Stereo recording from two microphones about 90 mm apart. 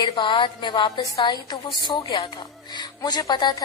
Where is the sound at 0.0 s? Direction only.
65° left (ahead or behind).